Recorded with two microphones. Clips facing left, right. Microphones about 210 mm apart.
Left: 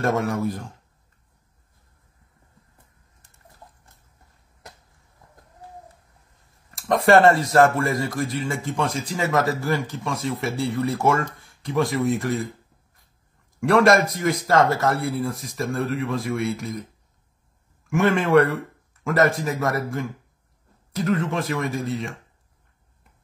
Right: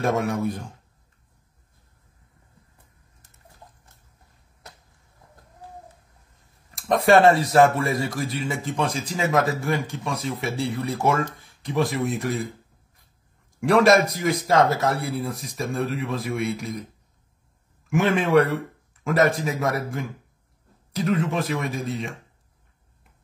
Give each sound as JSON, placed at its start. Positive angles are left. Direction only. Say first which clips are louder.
{"t": 0.0, "sound": "speech", "louder": "left 1 dB", "side_deg": 0}
{"t": 6.7, "sound": "speech", "louder": "left 1 dB", "side_deg": 0}
{"t": 13.7, "sound": "speech", "louder": "even", "side_deg": 0}
{"t": 17.9, "sound": "speech", "louder": "left 1 dB", "side_deg": 0}